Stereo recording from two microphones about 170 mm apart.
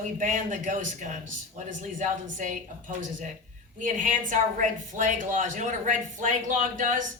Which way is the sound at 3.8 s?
50° right (ahead or behind).